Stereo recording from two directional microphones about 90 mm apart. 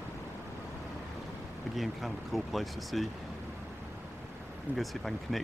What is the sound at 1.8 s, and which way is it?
Speech, centre (ahead or behind).